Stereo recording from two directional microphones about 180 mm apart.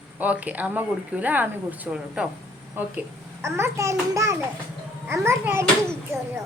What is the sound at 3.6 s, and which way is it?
Speech, 15° right (ahead or behind).